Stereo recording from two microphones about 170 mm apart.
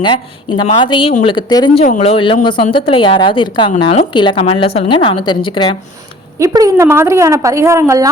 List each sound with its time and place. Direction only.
0.0 s speech: 25° left (ahead or behind)
1.7 s a woman's voice: 40° left (ahead or behind)
6.4 s a woman's voice: 20° right (ahead or behind)